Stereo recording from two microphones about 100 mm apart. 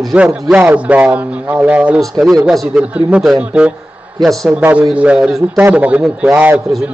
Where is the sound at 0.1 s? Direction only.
15° right (ahead or behind).